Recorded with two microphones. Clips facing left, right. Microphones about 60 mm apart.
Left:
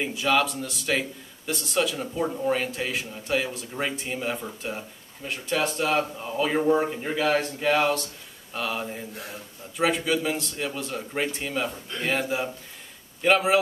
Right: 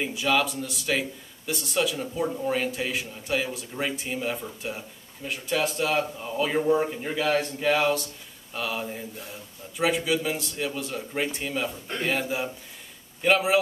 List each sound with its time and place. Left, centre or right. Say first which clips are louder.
0.0 s a man's voice: left 1 dB; centre
9.1 s speech: left 2 dB; left
9.8 s a man's voice: left 1 dB; centre